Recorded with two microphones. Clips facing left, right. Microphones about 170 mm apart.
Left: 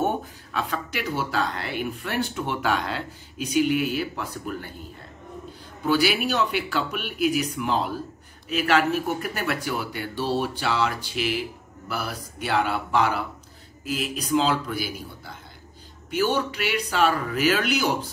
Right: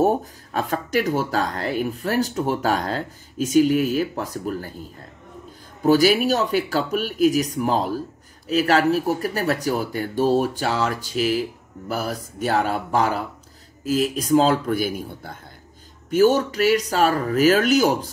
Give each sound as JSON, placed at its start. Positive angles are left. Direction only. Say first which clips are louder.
{"t": 0.0, "sound": "speech", "louder": "right 6 dB", "side_deg": -40}
{"t": 5.9, "sound": "a man's voice", "louder": "right 6 dB", "side_deg": -40}